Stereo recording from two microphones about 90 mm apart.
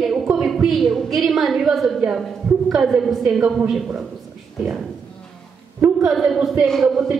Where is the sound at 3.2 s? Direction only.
10° right (ahead or behind).